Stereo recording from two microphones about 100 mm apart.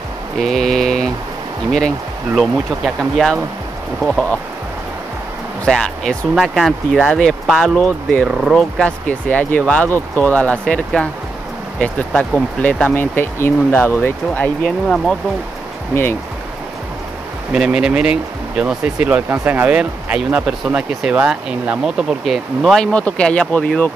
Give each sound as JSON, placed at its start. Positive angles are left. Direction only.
{"t": 0.4, "sound": "mantra", "side_deg": 5}
{"t": 1.7, "sound": "speech", "side_deg": 5}
{"t": 4.0, "sound": "speech", "side_deg": 5}
{"t": 5.7, "sound": "speech", "side_deg": 5}
{"t": 8.3, "sound": "speech", "side_deg": -5}
{"t": 8.5, "sound": "speech", "side_deg": 10}
{"t": 15.9, "sound": "speech", "side_deg": 25}
{"t": 17.5, "sound": "speech", "side_deg": -10}